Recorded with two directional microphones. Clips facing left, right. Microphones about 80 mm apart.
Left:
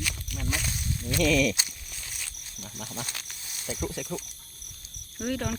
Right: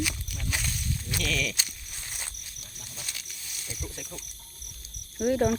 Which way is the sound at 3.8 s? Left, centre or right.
Left.